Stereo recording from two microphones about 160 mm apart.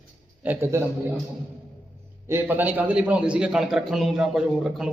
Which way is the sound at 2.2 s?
15° right (ahead or behind).